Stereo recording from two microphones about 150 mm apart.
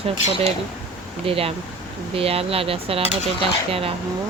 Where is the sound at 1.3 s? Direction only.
40° right (ahead or behind).